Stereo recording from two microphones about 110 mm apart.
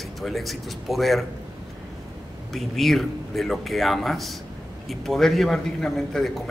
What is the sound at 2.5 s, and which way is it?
Speech, centre (ahead or behind).